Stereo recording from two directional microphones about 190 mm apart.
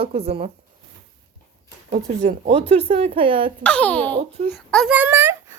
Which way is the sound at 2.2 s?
35° right (ahead or behind).